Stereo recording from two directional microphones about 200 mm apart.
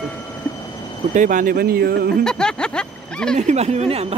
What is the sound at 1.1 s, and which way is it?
Speech, 40° right (ahead or behind).